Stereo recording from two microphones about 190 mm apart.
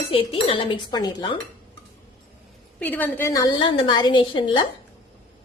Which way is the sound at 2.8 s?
10° left (ahead or behind).